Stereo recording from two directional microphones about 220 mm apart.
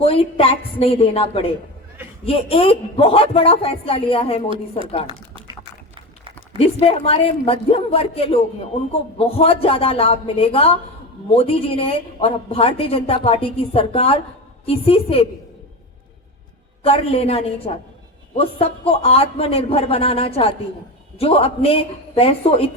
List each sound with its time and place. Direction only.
0.0 s a woman's voice: 25° left (ahead or behind)
6.7 s a woman's voice: 25° left (ahead or behind)
16.8 s a woman's voice: 25° left (ahead or behind)